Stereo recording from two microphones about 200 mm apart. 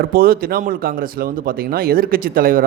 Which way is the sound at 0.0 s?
50° right (ahead or behind).